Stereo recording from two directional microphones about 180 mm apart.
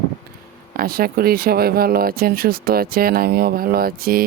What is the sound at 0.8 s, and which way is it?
Speech, 55° right (ahead or behind).